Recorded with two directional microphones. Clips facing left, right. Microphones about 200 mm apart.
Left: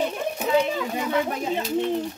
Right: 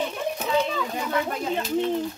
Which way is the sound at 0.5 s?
10° left (ahead or behind).